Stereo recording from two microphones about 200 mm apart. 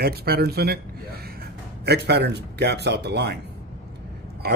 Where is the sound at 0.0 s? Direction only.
50° right (ahead or behind).